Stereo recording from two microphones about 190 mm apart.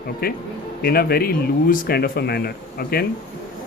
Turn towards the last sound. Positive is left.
turn(degrees=55)  # may be behind; listen again after turning